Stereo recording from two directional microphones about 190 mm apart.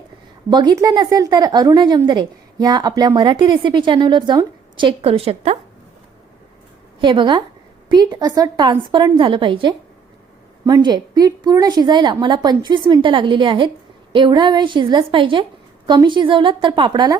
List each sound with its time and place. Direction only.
0.5 s speech: 20° right (ahead or behind)
7.0 s speech: 25° right (ahead or behind)